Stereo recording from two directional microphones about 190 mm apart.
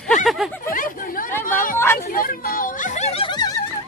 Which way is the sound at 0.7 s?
45° left (ahead or behind).